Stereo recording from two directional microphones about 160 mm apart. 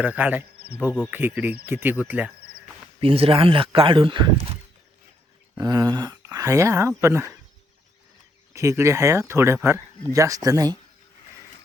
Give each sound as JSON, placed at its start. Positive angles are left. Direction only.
{"t": 0.0, "sound": "speech", "side_deg": -10}
{"t": 3.0, "sound": "speech", "side_deg": -35}
{"t": 5.5, "sound": "speech", "side_deg": -25}
{"t": 8.5, "sound": "speech", "side_deg": -20}